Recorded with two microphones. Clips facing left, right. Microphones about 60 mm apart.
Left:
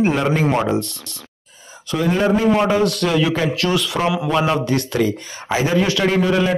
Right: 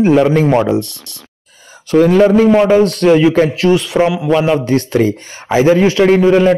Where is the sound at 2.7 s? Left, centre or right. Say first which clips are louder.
Right 8 dB; right.